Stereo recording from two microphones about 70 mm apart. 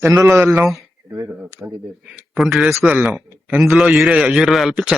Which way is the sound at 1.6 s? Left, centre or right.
Centre.